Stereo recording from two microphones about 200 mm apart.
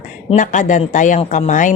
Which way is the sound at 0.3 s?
40° left (ahead or behind).